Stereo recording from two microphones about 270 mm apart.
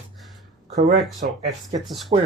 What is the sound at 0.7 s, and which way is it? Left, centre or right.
Speech, right.